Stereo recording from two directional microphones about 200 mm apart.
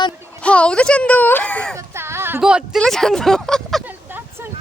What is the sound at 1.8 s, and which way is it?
Speech, 10° right (ahead or behind).